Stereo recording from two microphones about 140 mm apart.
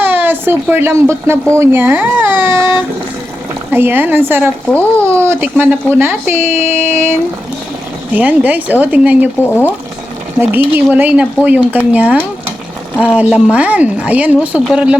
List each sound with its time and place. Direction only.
0.0 s speech: 15° right (ahead or behind)
1.5 s a sound: 20° right (ahead or behind)
3.7 s speech: 15° right (ahead or behind)
4.7 s speech: 10° left (ahead or behind)
5.1 s speech: 15° right (ahead or behind)
9.4 s speech: 15° left (ahead or behind)
10.5 s speech: 15° right (ahead or behind)